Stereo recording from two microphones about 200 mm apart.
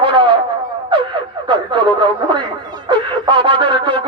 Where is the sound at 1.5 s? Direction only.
25° right (ahead or behind).